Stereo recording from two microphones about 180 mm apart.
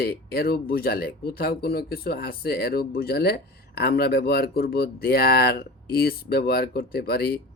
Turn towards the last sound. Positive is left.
turn(degrees=55)  # may be behind; listen again after turning